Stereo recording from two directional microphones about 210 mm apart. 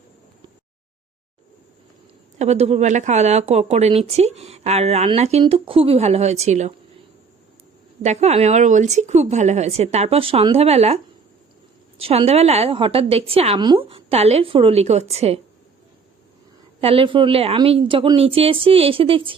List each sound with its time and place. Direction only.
2.4 s speech: 30° right (ahead or behind)
8.0 s a woman's voice: 30° right (ahead or behind)
16.8 s a woman's voice: 25° right (ahead or behind)